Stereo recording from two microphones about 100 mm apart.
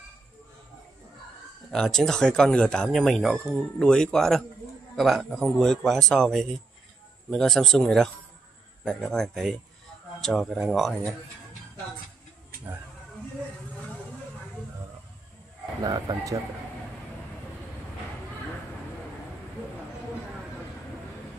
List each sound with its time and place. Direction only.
1.7 s speech: 5° left (ahead or behind)
15.8 s speech: 40° right (ahead or behind)